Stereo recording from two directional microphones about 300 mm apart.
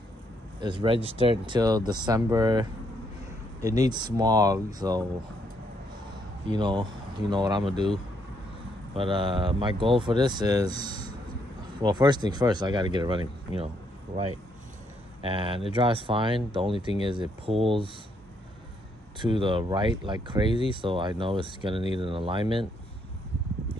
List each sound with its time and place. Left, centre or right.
0.6 s speech: centre
6.4 s speech: centre
15.2 s speech: centre
19.1 s speech: centre